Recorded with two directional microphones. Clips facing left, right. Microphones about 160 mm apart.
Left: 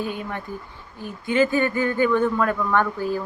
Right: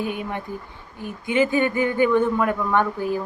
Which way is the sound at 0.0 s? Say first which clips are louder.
Right 1 dB; 15° right (ahead or behind).